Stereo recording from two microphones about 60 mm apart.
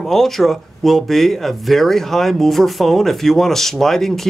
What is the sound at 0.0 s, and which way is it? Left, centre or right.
Speech, centre.